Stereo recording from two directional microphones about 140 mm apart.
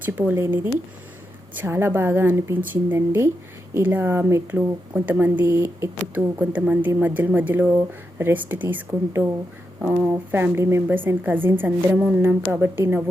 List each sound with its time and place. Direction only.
0.0 s a woman's voice: 10° right (ahead or behind)